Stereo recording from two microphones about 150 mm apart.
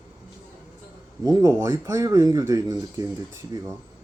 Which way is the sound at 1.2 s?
25° right (ahead or behind).